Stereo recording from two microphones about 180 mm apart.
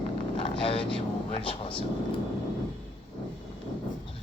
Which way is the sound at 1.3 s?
30° left (ahead or behind).